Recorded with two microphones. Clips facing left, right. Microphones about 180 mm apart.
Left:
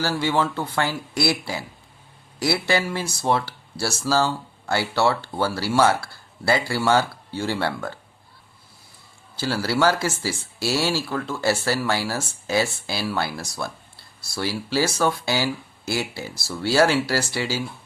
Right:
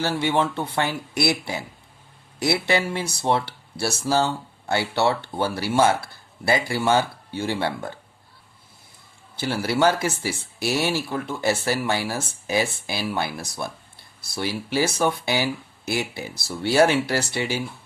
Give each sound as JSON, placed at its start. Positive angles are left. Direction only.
{"t": 0.0, "sound": "speech", "side_deg": -25}
{"t": 9.4, "sound": "speech", "side_deg": -20}